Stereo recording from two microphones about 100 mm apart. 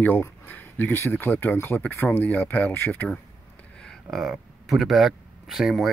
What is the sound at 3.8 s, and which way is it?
Speech, 5° left (ahead or behind).